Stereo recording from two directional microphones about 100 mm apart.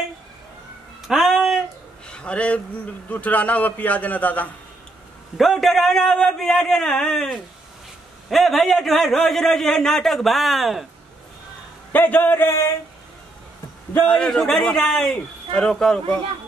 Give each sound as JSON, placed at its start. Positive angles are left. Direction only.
{"t": 1.0, "sound": "a sound", "side_deg": -5}
{"t": 2.0, "sound": "a sound", "side_deg": 10}
{"t": 3.1, "sound": "a man's voice", "side_deg": 15}
{"t": 5.4, "sound": "a man's voice", "side_deg": 0}
{"t": 11.9, "sound": "speech", "side_deg": 20}
{"t": 13.9, "sound": "a man's voice", "side_deg": 10}